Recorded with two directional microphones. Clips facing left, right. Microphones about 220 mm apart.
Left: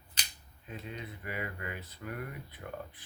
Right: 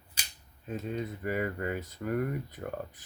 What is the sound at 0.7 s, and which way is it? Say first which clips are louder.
Speech: right 8 dB; 45° right (ahead or behind).